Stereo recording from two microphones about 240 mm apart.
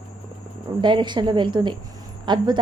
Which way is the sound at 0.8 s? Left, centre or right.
Centre.